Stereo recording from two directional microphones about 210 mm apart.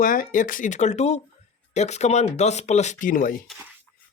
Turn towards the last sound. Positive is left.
turn(degrees=40)  # may be behind; listen again after turning